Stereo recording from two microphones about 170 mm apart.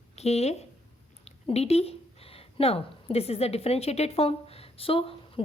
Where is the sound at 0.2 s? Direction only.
40° left (ahead or behind).